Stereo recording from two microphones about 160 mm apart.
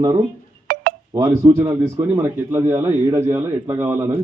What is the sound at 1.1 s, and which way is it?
A man's voice, 15° right (ahead or behind).